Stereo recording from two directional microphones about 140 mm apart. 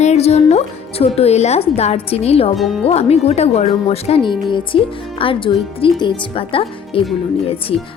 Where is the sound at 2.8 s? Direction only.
50° left (ahead or behind).